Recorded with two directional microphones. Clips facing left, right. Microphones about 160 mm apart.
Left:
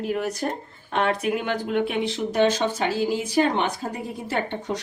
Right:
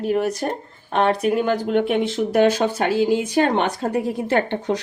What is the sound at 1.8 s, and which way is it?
Speech, 50° right (ahead or behind).